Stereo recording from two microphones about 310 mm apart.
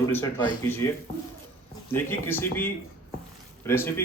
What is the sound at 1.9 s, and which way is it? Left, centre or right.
Speech, centre.